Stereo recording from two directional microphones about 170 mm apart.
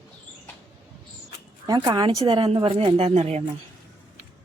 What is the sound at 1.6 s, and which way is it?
Speech, 25° right (ahead or behind).